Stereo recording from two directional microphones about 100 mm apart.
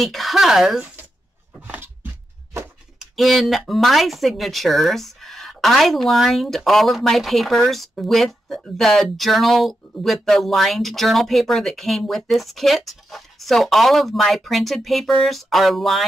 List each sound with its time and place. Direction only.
0.0 s speech: centre (ahead or behind)
1.6 s a sound: 20° right (ahead or behind)
3.0 s speech: centre (ahead or behind)